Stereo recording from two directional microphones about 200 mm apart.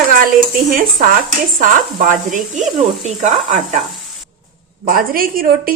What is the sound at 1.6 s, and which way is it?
Speech, 40° right (ahead or behind).